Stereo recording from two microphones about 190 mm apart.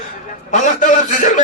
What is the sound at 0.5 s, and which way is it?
Speech, 40° left (ahead or behind).